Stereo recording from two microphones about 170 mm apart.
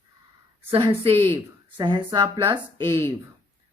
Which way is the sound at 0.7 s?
35° right (ahead or behind).